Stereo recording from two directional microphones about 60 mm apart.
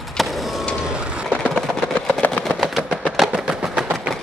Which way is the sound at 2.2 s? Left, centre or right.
Left.